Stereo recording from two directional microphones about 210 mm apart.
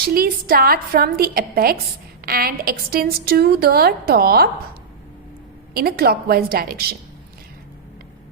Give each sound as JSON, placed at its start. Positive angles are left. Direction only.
{"t": 0.1, "sound": "a woman's voice", "side_deg": -45}
{"t": 5.7, "sound": "a woman's voice", "side_deg": -45}